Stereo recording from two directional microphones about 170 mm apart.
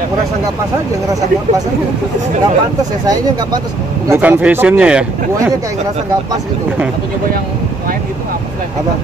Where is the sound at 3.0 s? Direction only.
20° right (ahead or behind); by 5.0 s 5° right (ahead or behind).